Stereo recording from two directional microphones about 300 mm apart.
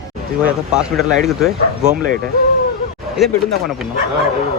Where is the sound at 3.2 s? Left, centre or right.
Centre.